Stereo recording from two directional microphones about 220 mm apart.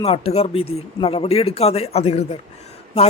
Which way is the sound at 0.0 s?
25° left (ahead or behind).